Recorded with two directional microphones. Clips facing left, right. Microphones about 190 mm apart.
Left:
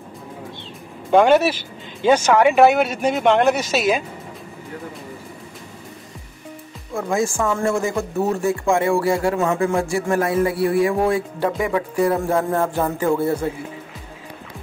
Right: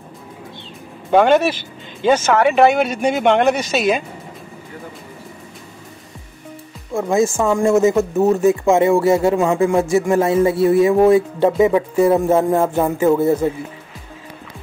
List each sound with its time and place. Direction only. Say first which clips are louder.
1.2 s speech: right 1 dB; 10° left (ahead or behind)
6.9 s speech: right 5 dB; 25° right (ahead or behind)